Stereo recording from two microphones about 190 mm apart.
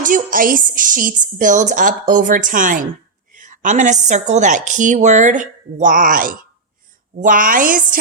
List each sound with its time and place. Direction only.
0.0 s a woman's voice: 45° right (ahead or behind)